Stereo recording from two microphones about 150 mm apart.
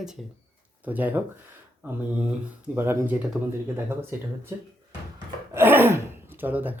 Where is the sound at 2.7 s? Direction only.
15° right (ahead or behind).